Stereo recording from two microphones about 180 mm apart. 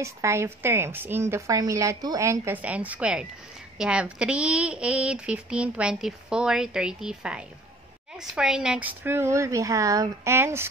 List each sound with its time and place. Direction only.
0.0 s a woman's voice: 15° right (ahead or behind)